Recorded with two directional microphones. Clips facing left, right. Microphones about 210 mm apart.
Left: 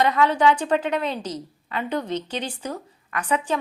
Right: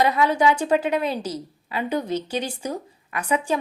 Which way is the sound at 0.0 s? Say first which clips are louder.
Even; 10° right (ahead or behind).